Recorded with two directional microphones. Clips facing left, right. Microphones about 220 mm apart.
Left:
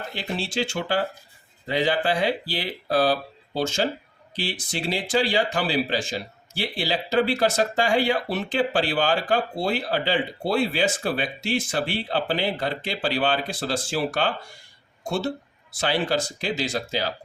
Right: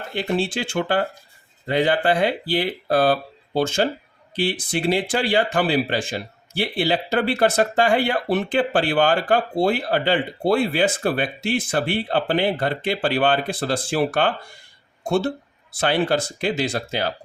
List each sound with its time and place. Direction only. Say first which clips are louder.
0.1 s speech: right 9 dB; 55° right (ahead or behind)